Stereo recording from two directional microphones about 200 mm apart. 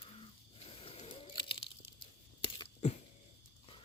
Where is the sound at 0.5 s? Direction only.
25° left (ahead or behind).